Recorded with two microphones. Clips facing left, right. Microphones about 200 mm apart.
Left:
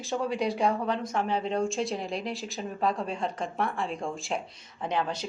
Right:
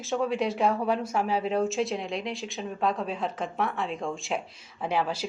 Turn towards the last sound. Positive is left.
turn(degrees=-5)  # may be behind; listen again after turning